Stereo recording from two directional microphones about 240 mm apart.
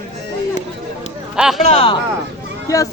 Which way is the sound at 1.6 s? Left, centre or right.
Left.